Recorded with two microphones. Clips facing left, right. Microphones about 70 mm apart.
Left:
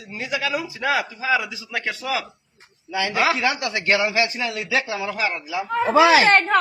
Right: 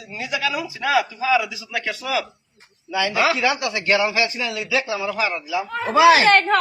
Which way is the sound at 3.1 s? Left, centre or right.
Left.